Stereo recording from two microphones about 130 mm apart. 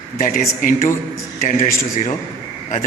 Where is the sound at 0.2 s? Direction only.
90° left.